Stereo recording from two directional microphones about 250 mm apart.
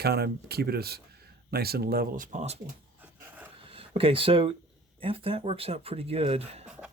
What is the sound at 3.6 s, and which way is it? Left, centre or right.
Speech, right.